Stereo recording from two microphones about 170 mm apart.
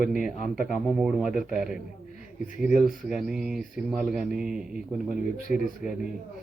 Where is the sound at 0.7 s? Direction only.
Centre (ahead or behind).